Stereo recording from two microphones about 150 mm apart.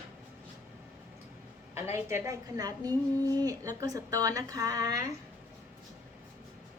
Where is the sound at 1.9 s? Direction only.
15° right (ahead or behind).